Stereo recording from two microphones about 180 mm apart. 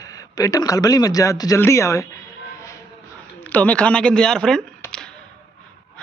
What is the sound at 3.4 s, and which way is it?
A woman's voice, 10° left (ahead or behind).